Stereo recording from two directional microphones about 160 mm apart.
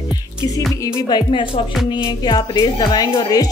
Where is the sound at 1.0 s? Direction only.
30° left (ahead or behind).